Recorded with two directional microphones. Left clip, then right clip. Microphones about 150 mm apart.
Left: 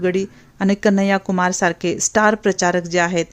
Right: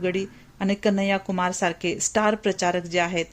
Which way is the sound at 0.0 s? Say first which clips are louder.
Left 6 dB; 50° left (ahead or behind).